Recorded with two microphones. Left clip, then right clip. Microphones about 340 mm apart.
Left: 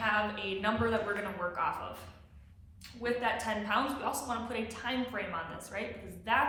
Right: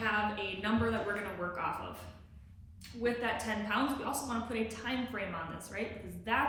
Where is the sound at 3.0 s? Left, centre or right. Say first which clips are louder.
Left 1 dB; centre.